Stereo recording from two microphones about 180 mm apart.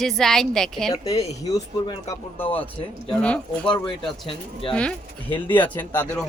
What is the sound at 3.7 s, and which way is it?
Speech, 25° left (ahead or behind).